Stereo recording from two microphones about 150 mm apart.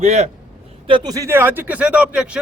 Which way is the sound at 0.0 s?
50° right (ahead or behind).